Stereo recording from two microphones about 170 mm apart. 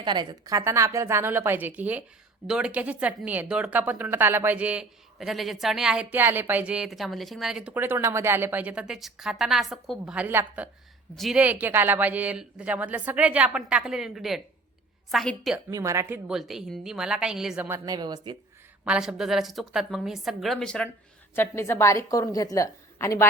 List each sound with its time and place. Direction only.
0.0 s a woman's voice: 25° right (ahead or behind); by 15.5 s centre (ahead or behind)
15.7 s speech: 20° right (ahead or behind)
16.3 s a woman's voice: centre (ahead or behind)
17.8 s speech: 25° right (ahead or behind)
18.9 s a woman's voice: 5° right (ahead or behind); by 23.2 s 15° left (ahead or behind)